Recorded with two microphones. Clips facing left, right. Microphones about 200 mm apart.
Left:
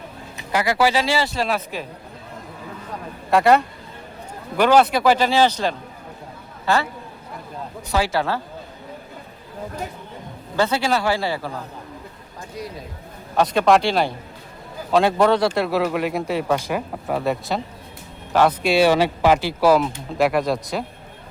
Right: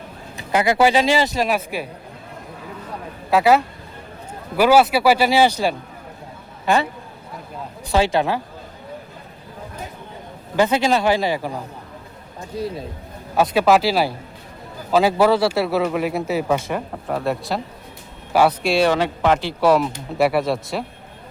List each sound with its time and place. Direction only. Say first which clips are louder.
0.3 s speech: right 3 dB; 20° right (ahead or behind)
3.2 s speech: even; 5° right (ahead or behind)
7.9 s speech: right 3 dB; 25° right (ahead or behind)
10.6 s speech: right 3 dB; 20° right (ahead or behind)
12.5 s speech: right 7 dB; 30° right (ahead or behind)
13.3 s a man's voice: right 1 dB; 5° right (ahead or behind)